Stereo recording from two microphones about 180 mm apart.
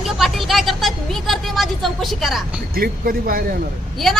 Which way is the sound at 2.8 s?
55° right (ahead or behind).